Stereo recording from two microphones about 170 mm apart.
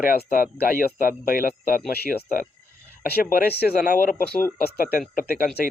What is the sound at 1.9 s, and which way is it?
Speech, 65° left (ahead or behind).